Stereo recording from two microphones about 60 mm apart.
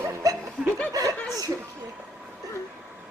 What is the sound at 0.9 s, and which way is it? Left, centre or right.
Speech, right.